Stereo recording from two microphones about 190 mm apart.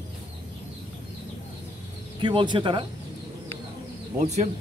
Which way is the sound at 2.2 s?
25° right (ahead or behind).